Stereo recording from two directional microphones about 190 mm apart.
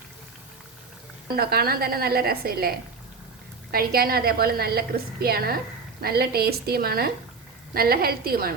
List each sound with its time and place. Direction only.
1.4 s a woman's voice: 55° right (ahead or behind)